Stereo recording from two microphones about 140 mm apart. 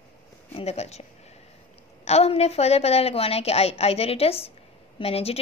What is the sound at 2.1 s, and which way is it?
A woman's voice, 50° left (ahead or behind).